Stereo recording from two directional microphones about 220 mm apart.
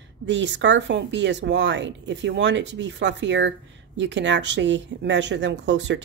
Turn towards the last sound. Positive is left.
turn(degrees=-55)  # may be behind; listen again after turning